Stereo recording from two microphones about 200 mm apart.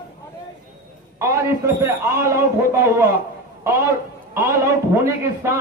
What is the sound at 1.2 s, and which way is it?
A man's voice, 15° right (ahead or behind).